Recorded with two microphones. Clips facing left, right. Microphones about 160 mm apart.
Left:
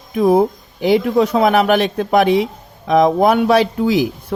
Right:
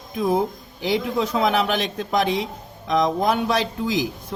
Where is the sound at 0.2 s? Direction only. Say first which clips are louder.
Left 8 dB; 60° left (ahead or behind).